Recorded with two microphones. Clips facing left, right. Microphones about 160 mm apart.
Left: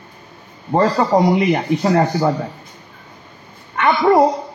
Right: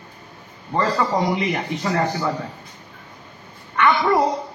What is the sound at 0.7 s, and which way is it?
Speech, 30° left (ahead or behind).